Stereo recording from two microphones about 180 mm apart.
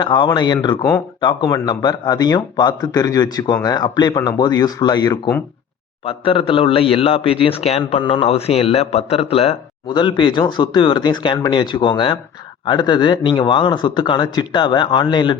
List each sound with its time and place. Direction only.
0.0 s a man's voice: 25° left (ahead or behind)